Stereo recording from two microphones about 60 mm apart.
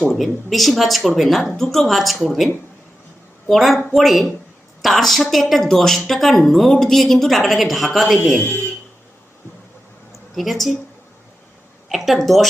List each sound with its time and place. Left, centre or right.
0.1 s a woman's voice: centre
3.5 s a woman's voice: centre
8.4 s speech: left
10.1 s a sound: centre
11.9 s a woman's voice: centre